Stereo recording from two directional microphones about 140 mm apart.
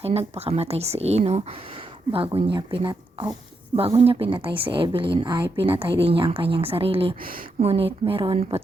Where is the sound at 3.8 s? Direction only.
45° right (ahead or behind).